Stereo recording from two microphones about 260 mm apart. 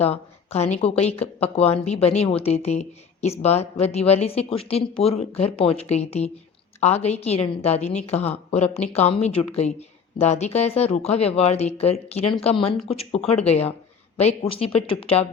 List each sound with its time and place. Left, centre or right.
0.0 s speech: left